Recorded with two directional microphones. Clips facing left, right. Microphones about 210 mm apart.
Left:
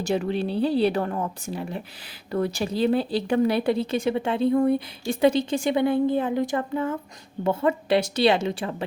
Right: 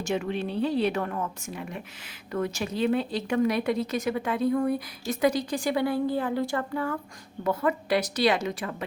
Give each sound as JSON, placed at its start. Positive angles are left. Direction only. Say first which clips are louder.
{"t": 0.0, "sound": "a woman's voice", "louder": "left 4 dB", "side_deg": 35}